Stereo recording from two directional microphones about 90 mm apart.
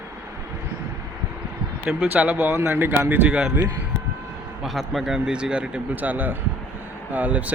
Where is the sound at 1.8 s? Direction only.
10° right (ahead or behind).